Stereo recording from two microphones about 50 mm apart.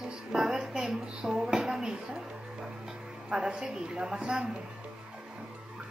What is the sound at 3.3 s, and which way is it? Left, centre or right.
A woman's voice, centre.